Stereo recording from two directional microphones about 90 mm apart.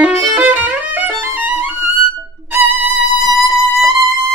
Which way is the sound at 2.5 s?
20° right (ahead or behind).